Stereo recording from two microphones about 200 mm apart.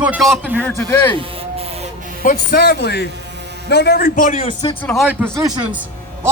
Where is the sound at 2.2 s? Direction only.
50° left (ahead or behind).